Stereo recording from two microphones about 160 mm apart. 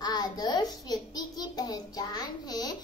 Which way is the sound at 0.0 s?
25° left (ahead or behind).